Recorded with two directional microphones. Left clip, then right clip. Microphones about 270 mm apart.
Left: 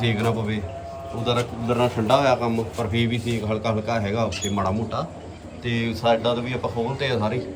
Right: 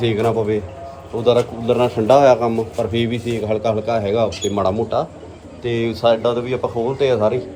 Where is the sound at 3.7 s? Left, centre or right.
Centre.